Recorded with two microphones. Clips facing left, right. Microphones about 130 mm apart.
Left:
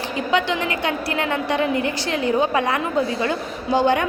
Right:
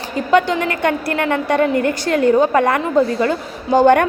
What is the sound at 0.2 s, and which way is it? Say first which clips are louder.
A woman's voice: right 6 dB; 50° right (ahead or behind).